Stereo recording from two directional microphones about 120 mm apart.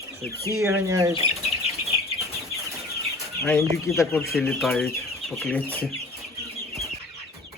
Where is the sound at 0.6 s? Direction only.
25° right (ahead or behind).